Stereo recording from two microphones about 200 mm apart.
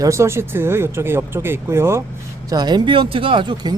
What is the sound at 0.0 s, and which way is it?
Speech, 15° right (ahead or behind).